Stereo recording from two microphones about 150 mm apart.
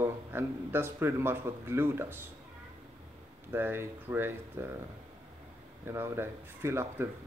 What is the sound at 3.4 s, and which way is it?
Speech, 15° right (ahead or behind).